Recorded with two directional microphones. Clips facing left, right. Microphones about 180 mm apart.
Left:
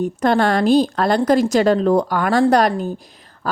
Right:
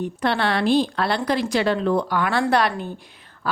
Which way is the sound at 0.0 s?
45° left (ahead or behind).